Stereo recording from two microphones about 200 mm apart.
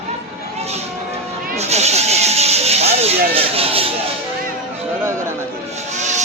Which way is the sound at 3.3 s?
30° right (ahead or behind).